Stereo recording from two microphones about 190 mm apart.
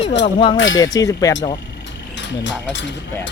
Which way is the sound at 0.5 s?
90° left.